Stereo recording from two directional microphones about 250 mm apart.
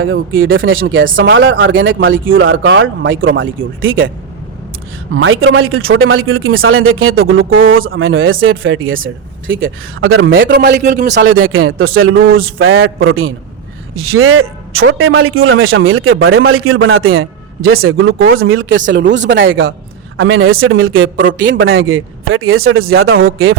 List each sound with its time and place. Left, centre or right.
0.0 s speech: right
5.1 s a man's voice: right